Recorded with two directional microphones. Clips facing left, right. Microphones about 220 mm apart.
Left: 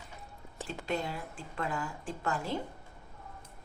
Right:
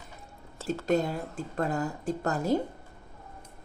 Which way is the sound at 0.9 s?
40° right (ahead or behind).